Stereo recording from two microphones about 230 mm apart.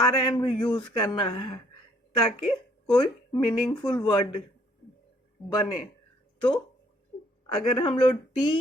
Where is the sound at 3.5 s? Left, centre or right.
Centre.